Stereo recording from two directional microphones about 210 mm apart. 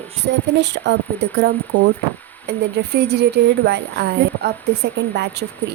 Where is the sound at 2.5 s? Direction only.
50° right (ahead or behind).